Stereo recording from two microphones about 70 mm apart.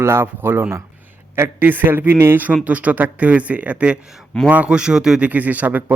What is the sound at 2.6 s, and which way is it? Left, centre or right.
Speech, right.